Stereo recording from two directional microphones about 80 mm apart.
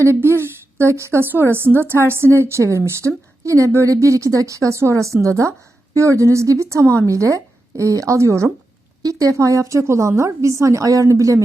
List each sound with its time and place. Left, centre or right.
0.0 s a woman's voice: right